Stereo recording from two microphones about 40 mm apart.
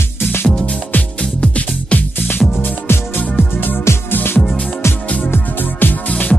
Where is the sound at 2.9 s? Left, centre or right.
Left.